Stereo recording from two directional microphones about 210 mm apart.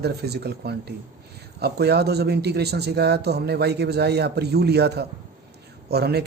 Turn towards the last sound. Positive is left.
turn(degrees=-50)  # may be behind; listen again after turning